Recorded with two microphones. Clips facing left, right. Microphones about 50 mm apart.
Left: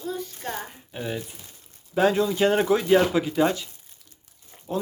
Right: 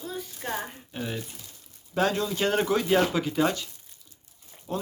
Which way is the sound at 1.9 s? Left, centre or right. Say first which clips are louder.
Left 5 dB; centre.